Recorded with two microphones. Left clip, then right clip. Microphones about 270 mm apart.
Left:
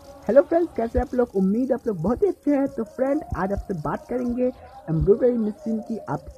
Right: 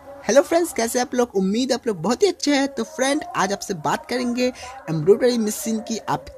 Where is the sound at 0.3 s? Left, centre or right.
Centre.